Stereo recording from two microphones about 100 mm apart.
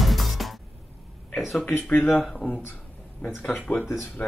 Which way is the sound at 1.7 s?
20° left (ahead or behind).